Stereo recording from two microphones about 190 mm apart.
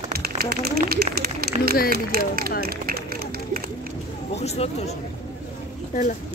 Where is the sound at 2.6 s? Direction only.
50° right (ahead or behind).